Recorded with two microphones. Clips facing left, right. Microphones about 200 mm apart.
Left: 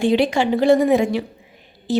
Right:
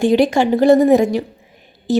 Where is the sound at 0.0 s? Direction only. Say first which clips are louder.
Right 4 dB; 45° right (ahead or behind).